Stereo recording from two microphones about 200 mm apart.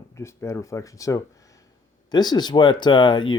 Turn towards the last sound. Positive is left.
turn(degrees=20)  # may be behind; listen again after turning